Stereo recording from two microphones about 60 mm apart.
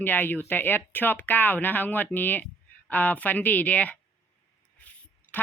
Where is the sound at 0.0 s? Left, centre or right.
Left.